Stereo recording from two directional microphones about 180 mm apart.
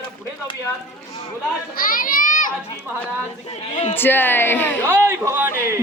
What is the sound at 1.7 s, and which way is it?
Speech, 50° left (ahead or behind).